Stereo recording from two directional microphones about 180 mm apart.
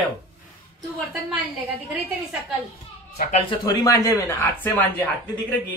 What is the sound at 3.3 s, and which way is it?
Speech, 25° left (ahead or behind).